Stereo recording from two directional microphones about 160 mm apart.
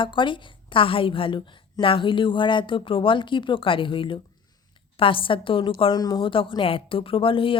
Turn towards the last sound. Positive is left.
turn(degrees=35)  # may be behind; listen again after turning